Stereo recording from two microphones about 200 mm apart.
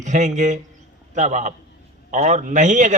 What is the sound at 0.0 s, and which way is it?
A man's voice, 40° right (ahead or behind).